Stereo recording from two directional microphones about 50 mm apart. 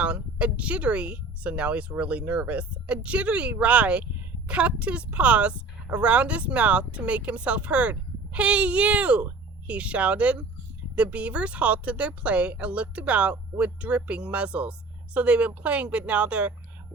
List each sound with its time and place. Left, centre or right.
0.0 s a woman's voice: right